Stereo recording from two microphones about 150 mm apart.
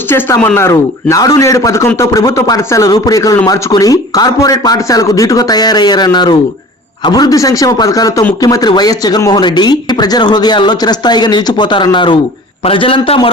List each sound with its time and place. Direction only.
0.1 s a man's voice: 15° left (ahead or behind); by 13.2 s 35° left (ahead or behind)